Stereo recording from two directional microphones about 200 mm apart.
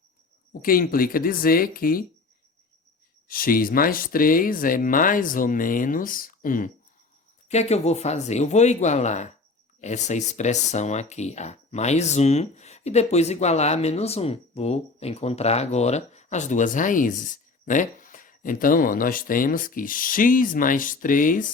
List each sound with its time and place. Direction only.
0.6 s speech: 45° left (ahead or behind)
3.2 s speech: 45° left (ahead or behind)